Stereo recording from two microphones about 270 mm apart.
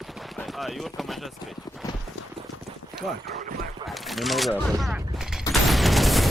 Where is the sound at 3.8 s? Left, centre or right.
Centre.